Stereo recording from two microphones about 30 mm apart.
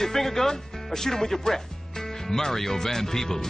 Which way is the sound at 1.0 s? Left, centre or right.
Centre.